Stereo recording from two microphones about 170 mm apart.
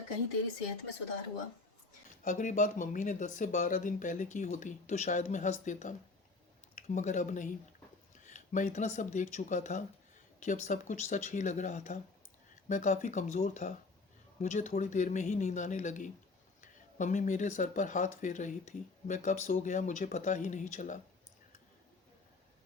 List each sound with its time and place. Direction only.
2.2 s speech: 50° left (ahead or behind)